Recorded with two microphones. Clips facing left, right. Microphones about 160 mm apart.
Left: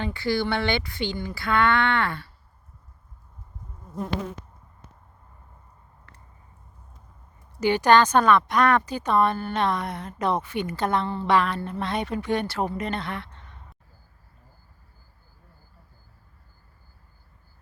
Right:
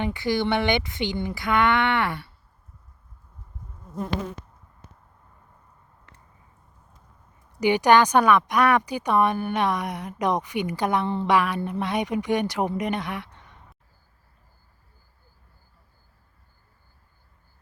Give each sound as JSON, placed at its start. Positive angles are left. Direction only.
{"t": 0.0, "sound": "speech", "side_deg": -15}
{"t": 7.6, "sound": "speech", "side_deg": -15}